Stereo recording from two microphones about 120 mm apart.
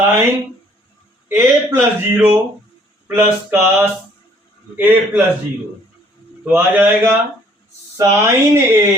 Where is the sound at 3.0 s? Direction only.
20° right (ahead or behind).